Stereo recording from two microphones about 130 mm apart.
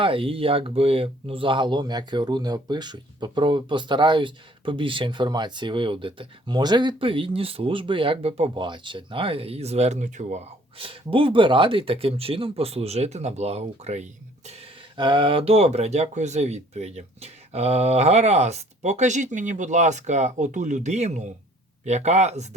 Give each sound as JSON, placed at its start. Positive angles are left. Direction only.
{"t": 0.0, "sound": "speech", "side_deg": -40}
{"t": 10.8, "sound": "speech", "side_deg": -45}
{"t": 14.9, "sound": "speech", "side_deg": -40}